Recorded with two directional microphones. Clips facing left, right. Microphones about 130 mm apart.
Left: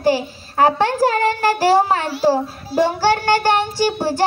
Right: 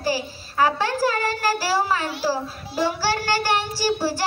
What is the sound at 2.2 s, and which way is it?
Child singing, 50° left (ahead or behind).